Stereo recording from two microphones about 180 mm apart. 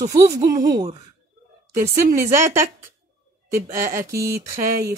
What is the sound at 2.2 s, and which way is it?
Speech, 15° right (ahead or behind).